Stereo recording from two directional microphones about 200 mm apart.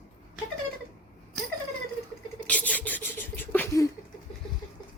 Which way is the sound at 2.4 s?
5° left (ahead or behind).